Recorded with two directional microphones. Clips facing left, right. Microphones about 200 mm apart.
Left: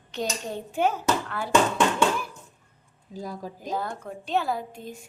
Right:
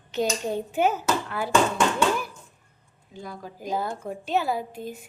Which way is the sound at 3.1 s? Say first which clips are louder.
Left 3 dB; 40° left (ahead or behind).